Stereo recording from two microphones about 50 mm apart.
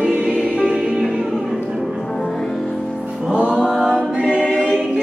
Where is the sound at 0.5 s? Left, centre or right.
Right.